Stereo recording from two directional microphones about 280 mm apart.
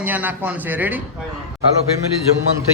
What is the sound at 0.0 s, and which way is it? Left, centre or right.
Speech, centre.